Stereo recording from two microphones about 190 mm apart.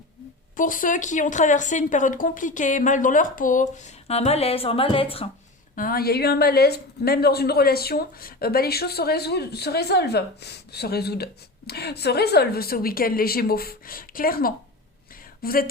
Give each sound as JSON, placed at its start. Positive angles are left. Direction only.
{"t": 0.5, "sound": "speech", "side_deg": 45}
{"t": 5.7, "sound": "speech", "side_deg": 50}